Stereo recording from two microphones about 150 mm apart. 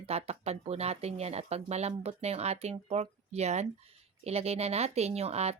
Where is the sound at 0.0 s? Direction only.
45° right (ahead or behind).